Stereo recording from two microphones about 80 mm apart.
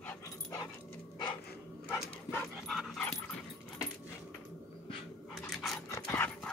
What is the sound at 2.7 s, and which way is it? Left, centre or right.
Dog, centre.